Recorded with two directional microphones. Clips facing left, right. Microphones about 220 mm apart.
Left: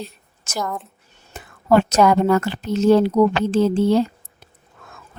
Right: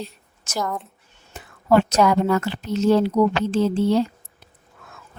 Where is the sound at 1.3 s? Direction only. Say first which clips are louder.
Left 2 dB; 50° left (ahead or behind).